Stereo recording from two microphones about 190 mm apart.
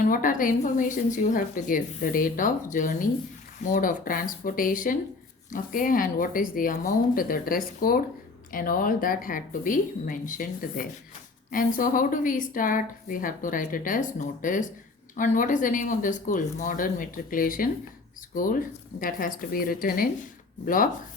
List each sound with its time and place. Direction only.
0.0 s speech: 45° left (ahead or behind)